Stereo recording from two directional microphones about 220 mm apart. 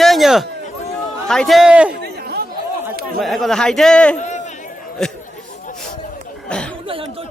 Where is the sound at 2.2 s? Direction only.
45° right (ahead or behind).